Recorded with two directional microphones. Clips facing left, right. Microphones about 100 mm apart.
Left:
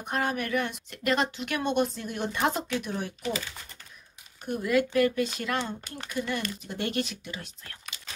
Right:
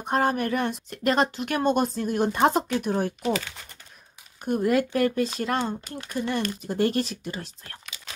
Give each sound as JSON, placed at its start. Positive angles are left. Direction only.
{"t": 0.0, "sound": "speech", "side_deg": -35}
{"t": 4.5, "sound": "speech", "side_deg": -45}